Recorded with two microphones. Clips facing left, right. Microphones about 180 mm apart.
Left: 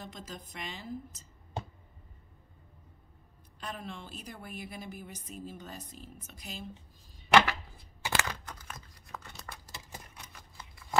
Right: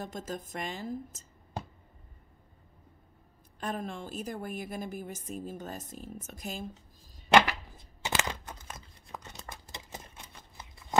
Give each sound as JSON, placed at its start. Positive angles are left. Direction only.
{"t": 0.0, "sound": "a woman's voice", "side_deg": -45}
{"t": 3.5, "sound": "a woman's voice", "side_deg": -45}
{"t": 7.2, "sound": "tearing", "side_deg": -20}